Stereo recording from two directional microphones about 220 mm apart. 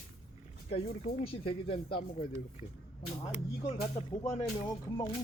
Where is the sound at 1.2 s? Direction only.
25° left (ahead or behind).